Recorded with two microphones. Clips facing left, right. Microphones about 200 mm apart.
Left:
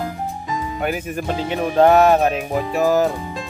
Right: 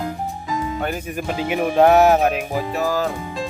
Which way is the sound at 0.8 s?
10° left (ahead or behind).